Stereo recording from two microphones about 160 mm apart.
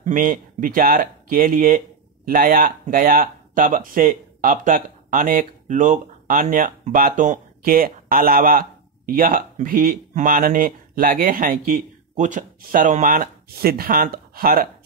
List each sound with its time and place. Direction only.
0.0 s speech: 55° right (ahead or behind)